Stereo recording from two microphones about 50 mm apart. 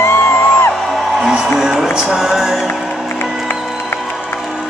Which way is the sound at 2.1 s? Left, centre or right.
Centre.